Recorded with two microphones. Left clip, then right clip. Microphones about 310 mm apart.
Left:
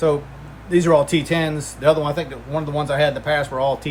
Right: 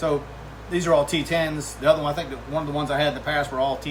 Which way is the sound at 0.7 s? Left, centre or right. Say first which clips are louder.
Left 5 dB; left.